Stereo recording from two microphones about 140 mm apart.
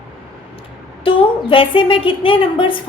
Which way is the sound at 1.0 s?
40° left (ahead or behind).